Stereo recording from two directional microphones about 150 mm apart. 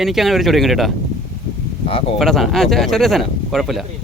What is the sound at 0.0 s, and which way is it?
Speech, centre (ahead or behind).